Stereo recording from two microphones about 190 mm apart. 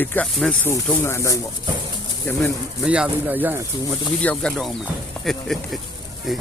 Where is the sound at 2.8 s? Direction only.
5° right (ahead or behind).